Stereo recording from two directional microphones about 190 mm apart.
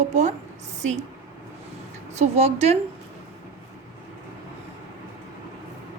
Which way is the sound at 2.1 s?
35° right (ahead or behind).